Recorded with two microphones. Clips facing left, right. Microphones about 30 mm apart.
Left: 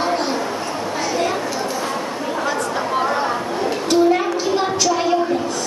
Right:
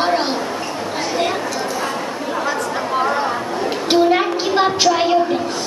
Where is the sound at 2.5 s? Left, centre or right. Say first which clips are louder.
Even; centre.